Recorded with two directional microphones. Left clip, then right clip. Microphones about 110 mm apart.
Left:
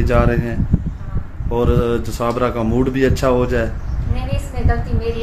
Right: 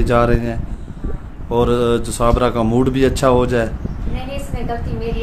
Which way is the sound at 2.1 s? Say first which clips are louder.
Right 3 dB; 20° right (ahead or behind).